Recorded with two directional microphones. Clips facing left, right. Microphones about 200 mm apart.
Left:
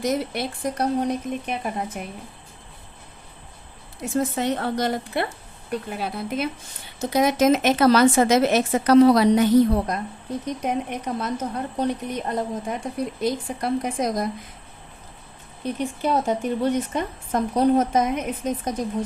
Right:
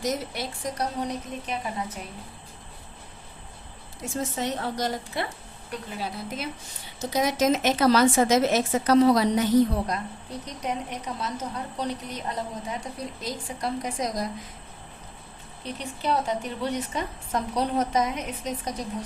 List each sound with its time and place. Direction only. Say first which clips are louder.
0.0 s speech: left 5 dB; 55° left (ahead or behind)
4.2 s a woman's voice: left 5 dB; 60° left (ahead or behind)
15.6 s a woman's voice: left 5 dB; 50° left (ahead or behind)